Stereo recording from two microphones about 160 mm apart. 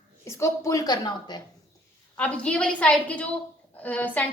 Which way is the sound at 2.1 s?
10° left (ahead or behind).